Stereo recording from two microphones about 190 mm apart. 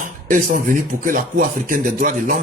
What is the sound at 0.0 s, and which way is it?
Speech, 45° right (ahead or behind).